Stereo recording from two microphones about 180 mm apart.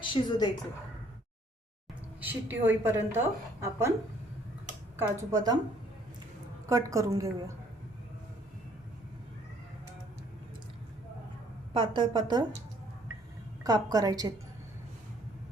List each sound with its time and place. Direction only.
0.1 s a woman's voice: 25° left (ahead or behind)
2.2 s a woman's voice: 10° right (ahead or behind)
4.9 s a woman's voice: 20° right (ahead or behind)
6.7 s a woman's voice: 20° right (ahead or behind)
11.7 s a woman's voice: 25° right (ahead or behind)
13.7 s a woman's voice: 20° right (ahead or behind)